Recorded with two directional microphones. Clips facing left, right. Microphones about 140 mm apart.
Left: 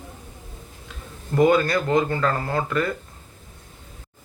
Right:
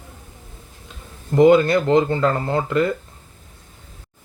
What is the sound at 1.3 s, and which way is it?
Speech, 20° right (ahead or behind).